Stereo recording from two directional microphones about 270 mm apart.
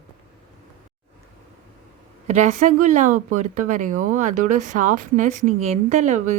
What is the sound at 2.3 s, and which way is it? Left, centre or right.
Speech, right.